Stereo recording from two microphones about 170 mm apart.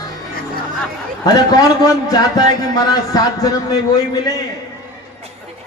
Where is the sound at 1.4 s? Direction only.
25° left (ahead or behind).